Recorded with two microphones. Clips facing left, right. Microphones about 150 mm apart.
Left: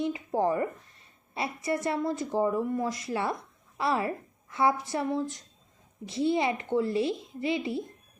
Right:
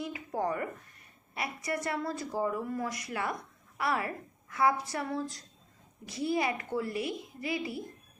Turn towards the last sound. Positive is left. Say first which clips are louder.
# left 5 dB
turn(degrees=25)  # may be behind; listen again after turning